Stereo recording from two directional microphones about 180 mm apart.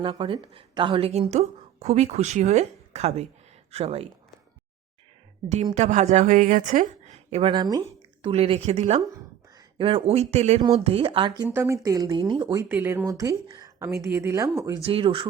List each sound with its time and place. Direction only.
0.0 s a woman's voice: 30° right (ahead or behind)
5.7 s a woman's voice: 40° right (ahead or behind)
7.5 s a woman's voice: 20° right (ahead or behind)
11.4 s speech: 15° right (ahead or behind)
14.8 s a woman's voice: 30° right (ahead or behind)